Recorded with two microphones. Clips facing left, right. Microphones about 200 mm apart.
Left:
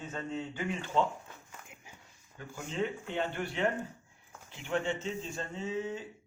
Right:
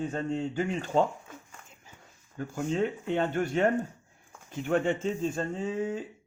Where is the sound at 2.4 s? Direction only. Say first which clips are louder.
Right 6 dB; 50° right (ahead or behind).